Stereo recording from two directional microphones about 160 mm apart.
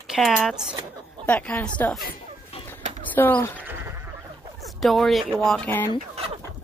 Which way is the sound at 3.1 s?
10° left (ahead or behind).